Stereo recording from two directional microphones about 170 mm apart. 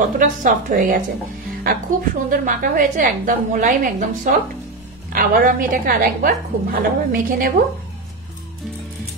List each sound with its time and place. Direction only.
0.0 s a woman's voice: 50° right (ahead or behind)